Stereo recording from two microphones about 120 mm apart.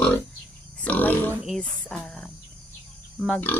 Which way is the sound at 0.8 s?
15° left (ahead or behind).